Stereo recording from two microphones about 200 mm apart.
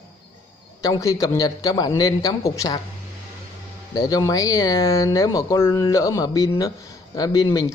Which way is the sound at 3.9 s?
20° left (ahead or behind).